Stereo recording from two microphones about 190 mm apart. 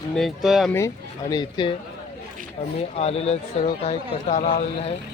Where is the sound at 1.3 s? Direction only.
25° left (ahead or behind).